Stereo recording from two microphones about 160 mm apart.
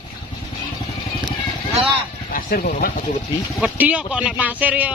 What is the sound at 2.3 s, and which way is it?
Speech, 60° left (ahead or behind).